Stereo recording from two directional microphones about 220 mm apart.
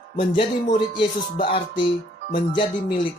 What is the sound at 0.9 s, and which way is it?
Speech, 25° left (ahead or behind).